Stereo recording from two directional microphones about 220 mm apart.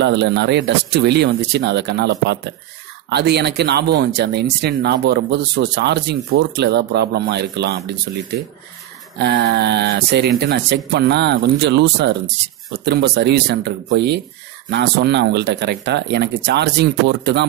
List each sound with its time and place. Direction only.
0.0 s speech: 50° right (ahead or behind)
9.2 s speech: 50° right (ahead or behind)